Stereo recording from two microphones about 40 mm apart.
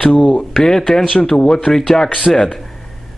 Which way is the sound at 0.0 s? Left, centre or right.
Left.